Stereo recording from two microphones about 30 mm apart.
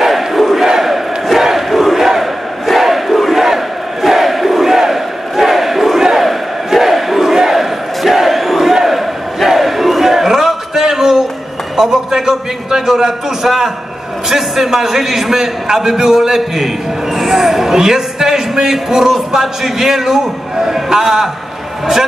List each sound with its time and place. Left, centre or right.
0.0 s crowd: centre
11.7 s a sound: centre
12.8 s a man's voice: centre